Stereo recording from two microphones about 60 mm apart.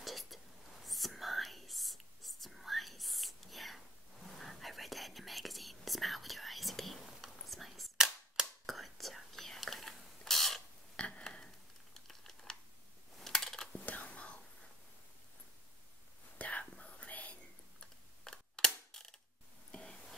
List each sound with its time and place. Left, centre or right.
0.0 s whispering: centre
11.0 s a sound: centre
12.1 s computer keyboard: centre
13.2 s typing: centre
13.7 s whispering: left
16.3 s whispering: left
18.2 s camera: centre
19.7 s a sound: centre